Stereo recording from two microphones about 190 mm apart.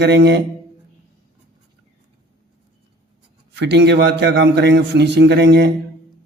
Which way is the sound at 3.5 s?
65° right (ahead or behind).